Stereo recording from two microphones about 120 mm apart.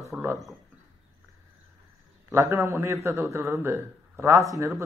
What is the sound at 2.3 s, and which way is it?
Speech, 25° right (ahead or behind).